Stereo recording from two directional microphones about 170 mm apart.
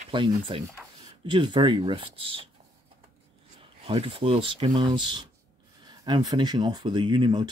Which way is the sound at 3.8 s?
35° right (ahead or behind).